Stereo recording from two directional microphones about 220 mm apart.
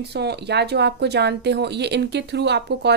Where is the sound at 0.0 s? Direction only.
50° right (ahead or behind).